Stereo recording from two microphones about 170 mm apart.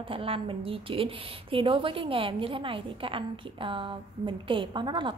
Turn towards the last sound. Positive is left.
turn(degrees=-25)  # may be behind; listen again after turning